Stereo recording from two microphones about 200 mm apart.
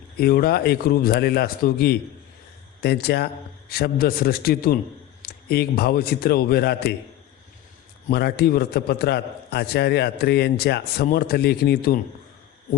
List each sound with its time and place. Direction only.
0.2 s a man's voice: 50° left (ahead or behind)
8.0 s a man's voice: 50° left (ahead or behind)